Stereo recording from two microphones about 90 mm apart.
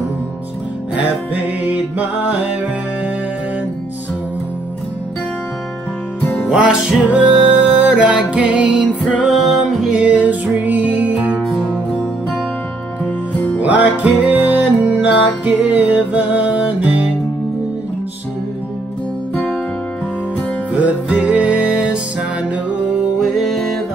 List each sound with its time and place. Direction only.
0.9 s music: 15° right (ahead or behind)
6.5 s music: 5° right (ahead or behind)
13.0 s music: 15° left (ahead or behind)
13.6 s music: 15° right (ahead or behind)
19.3 s music: 5° left (ahead or behind)
20.7 s music: 15° right (ahead or behind)